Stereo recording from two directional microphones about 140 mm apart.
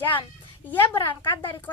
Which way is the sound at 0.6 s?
15° left (ahead or behind).